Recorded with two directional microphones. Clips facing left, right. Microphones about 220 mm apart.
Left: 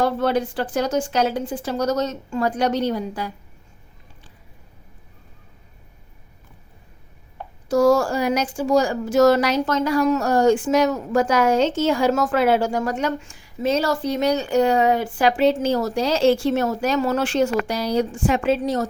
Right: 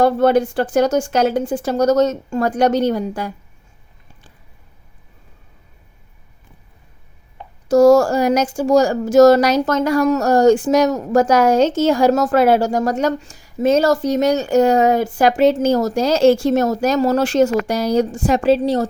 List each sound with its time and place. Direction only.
0.0 s speech: 50° right (ahead or behind)
7.7 s speech: 45° right (ahead or behind)